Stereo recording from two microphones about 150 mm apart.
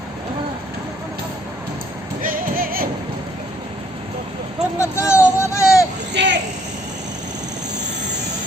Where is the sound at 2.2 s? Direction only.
70° right (ahead or behind).